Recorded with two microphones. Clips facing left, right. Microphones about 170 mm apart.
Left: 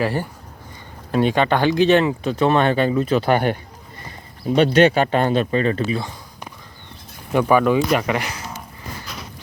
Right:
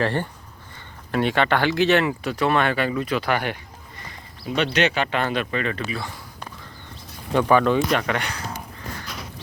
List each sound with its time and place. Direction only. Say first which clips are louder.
0.0 s speech: left 1 dB; 10° left (ahead or behind); by 3.4 s 30° left (ahead or behind)
4.0 s speech: left 8 dB; 40° left (ahead or behind)
6.0 s a sound: left 3 dB; 20° left (ahead or behind)
7.3 s speech: left 2 dB; 10° left (ahead or behind)